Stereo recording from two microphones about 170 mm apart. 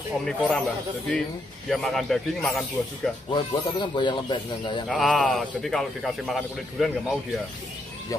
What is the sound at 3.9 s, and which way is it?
Speech, 25° left (ahead or behind).